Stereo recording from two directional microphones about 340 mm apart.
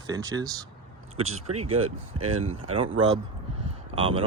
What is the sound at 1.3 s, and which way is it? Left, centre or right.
Speech, right.